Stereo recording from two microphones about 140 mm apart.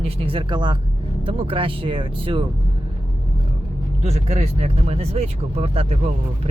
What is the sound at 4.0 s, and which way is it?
Speech, 50° right (ahead or behind).